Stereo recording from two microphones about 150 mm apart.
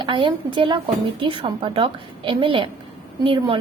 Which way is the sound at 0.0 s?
30° right (ahead or behind).